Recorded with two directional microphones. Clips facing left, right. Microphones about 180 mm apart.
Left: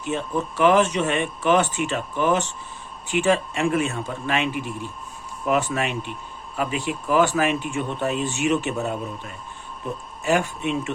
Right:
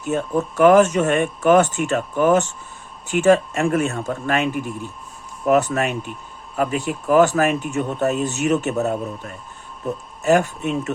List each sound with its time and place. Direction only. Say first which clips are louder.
0.0 s a man's voice: right 4 dB; 45° right (ahead or behind)